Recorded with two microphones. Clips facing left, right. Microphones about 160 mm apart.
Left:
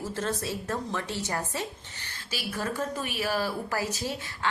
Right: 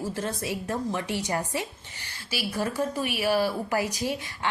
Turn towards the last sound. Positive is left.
turn(degrees=-15)  # may be behind; listen again after turning